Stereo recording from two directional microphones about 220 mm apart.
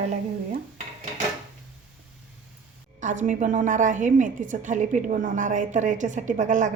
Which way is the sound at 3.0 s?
35° right (ahead or behind).